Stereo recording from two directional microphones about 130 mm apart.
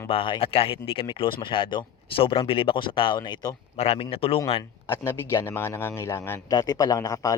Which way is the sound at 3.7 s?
50° left (ahead or behind).